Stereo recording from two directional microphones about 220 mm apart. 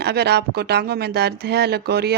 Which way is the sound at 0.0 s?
50° right (ahead or behind).